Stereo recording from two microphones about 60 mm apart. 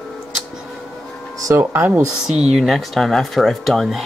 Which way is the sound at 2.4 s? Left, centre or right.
Centre.